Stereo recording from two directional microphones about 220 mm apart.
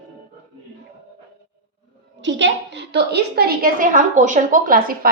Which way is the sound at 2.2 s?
55° right (ahead or behind).